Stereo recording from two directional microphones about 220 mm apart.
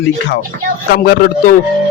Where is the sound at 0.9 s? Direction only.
45° left (ahead or behind).